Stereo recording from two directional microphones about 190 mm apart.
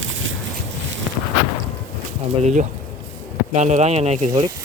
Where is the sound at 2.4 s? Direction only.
35° right (ahead or behind).